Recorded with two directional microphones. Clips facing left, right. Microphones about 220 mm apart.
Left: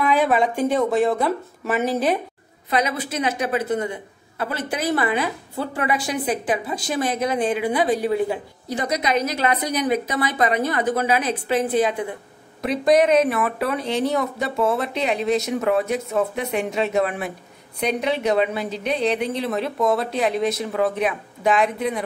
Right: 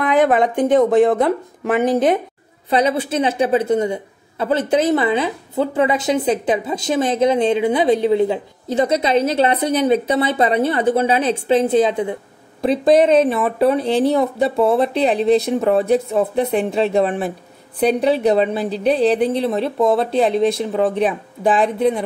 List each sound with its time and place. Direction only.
0.1 s a woman's voice: 20° right (ahead or behind)
2.7 s a woman's voice: 30° right (ahead or behind)